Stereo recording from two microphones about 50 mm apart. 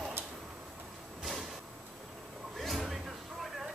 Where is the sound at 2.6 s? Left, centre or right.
Centre.